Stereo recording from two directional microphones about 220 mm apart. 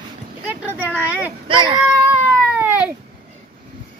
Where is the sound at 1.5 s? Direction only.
20° right (ahead or behind).